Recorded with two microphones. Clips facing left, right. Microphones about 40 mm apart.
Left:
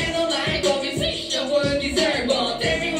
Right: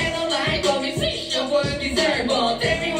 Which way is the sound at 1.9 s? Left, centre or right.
Centre.